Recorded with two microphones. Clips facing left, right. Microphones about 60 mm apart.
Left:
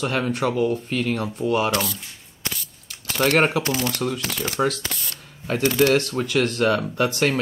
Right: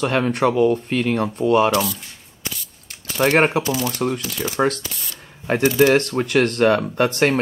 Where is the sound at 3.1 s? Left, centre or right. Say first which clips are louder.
Right 2 dB; right.